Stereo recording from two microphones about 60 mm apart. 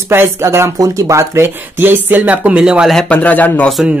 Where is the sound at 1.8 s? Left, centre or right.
Right; by 2.8 s centre.